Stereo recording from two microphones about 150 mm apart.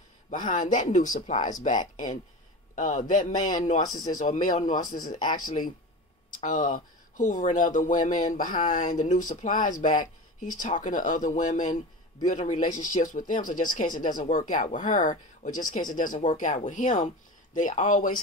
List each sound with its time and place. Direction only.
0.3 s speech: 60° left (ahead or behind)
3.8 s speech: 25° left (ahead or behind)
4.2 s speech: 60° left (ahead or behind)
4.8 s speech: 25° left (ahead or behind)
5.1 s speech: 60° left (ahead or behind)